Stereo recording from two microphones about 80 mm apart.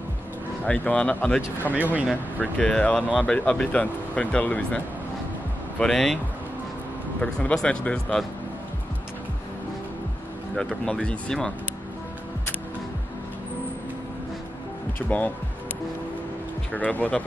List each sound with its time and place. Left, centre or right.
0.7 s speech: centre
1.7 s speech: right
2.6 s speech: centre
5.8 s speech: centre
7.2 s speech: centre
10.5 s speech: centre
15.0 s speech: centre
16.7 s speech: centre